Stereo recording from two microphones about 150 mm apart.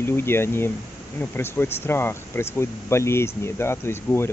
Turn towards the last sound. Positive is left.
turn(degrees=15)  # may be behind; listen again after turning